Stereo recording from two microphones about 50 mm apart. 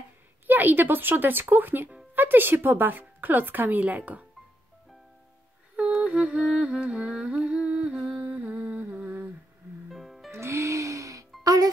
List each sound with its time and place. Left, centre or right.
0.5 s a woman's voice: right
5.8 s music: right
7.8 s humming: centre
8.3 s humming: right
9.8 s music: centre
10.3 s music: right